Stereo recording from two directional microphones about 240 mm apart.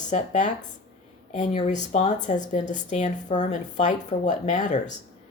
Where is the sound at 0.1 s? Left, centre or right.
Left.